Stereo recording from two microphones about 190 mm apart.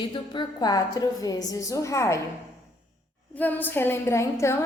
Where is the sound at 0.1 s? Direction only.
20° left (ahead or behind).